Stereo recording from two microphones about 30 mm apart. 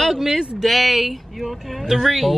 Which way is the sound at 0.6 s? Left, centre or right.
Centre.